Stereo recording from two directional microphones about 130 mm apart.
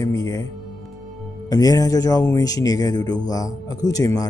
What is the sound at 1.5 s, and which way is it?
Speech, 30° left (ahead or behind).